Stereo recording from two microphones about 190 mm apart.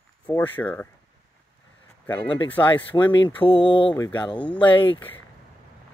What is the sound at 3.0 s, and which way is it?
Speech, 25° left (ahead or behind).